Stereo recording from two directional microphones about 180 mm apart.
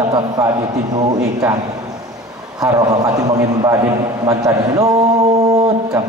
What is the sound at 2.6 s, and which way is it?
A man's voice, 20° right (ahead or behind).